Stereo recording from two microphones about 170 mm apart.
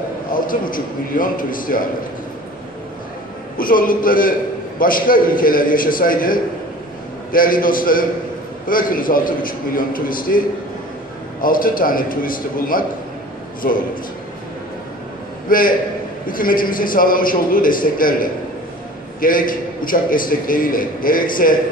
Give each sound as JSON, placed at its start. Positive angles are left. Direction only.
{"t": 0.3, "sound": "a man's voice", "side_deg": 55}
{"t": 3.5, "sound": "a man's voice", "side_deg": 55}
{"t": 11.4, "sound": "a man's voice", "side_deg": 55}
{"t": 15.4, "sound": "a man's voice", "side_deg": 55}